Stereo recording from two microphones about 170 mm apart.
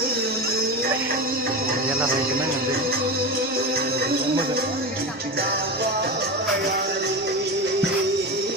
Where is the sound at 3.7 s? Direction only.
65° right (ahead or behind).